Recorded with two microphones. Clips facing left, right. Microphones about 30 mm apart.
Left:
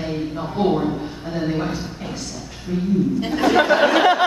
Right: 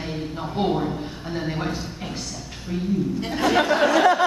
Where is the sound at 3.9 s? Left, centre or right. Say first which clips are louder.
Left 2 dB; left.